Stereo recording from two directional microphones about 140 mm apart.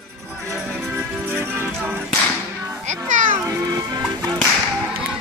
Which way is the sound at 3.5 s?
25° right (ahead or behind).